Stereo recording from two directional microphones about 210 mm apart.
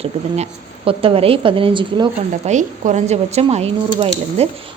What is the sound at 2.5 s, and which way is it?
Speech, 35° right (ahead or behind).